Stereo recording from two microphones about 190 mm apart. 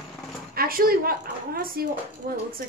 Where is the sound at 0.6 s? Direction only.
50° right (ahead or behind).